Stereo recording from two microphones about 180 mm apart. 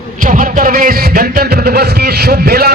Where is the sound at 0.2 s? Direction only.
50° right (ahead or behind).